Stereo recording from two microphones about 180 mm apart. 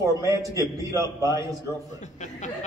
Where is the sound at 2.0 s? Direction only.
40° left (ahead or behind).